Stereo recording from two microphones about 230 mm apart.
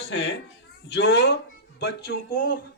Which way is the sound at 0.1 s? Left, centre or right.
Left.